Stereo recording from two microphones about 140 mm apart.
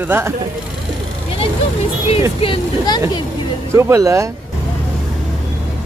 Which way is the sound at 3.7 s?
20° right (ahead or behind).